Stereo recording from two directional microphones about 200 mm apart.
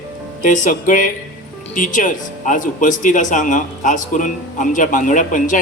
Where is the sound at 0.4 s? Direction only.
40° left (ahead or behind).